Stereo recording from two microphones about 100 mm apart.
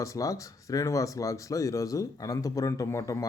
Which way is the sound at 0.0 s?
35° left (ahead or behind).